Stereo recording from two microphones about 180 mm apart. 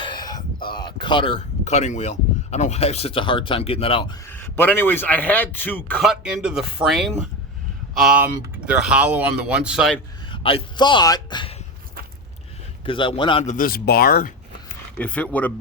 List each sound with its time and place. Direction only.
0.0 s speech: 25° left (ahead or behind)
4.3 s speech: 10° left (ahead or behind)
6.0 s speech: centre (ahead or behind)
10.2 s a man's voice: 30° left (ahead or behind)
12.8 s a man's voice: 30° left (ahead or behind)
13.4 s speech: 45° left (ahead or behind)
14.9 s speech: 10° left (ahead or behind)